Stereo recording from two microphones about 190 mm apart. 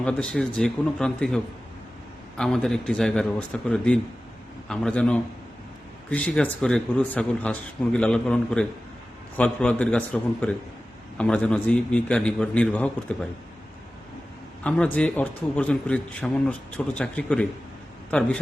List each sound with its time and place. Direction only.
0.0 s a man's voice: 5° left (ahead or behind)
2.4 s a man's voice: centre (ahead or behind)
14.6 s a man's voice: 5° left (ahead or behind)